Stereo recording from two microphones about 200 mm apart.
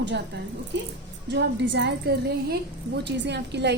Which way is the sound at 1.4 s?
60° right (ahead or behind).